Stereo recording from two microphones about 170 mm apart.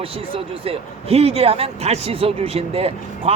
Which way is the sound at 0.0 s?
35° right (ahead or behind).